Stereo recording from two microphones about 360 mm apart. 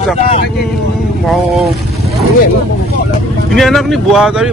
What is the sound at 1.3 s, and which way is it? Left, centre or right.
Speech, centre.